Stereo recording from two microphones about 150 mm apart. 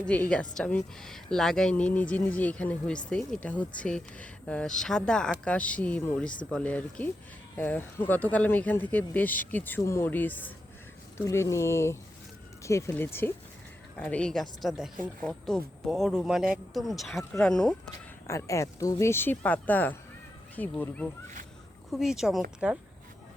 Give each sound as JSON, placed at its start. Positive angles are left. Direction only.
{"t": 0.0, "sound": "speech", "side_deg": 10}
{"t": 18.3, "sound": "speech", "side_deg": 20}
{"t": 21.9, "sound": "speech", "side_deg": -5}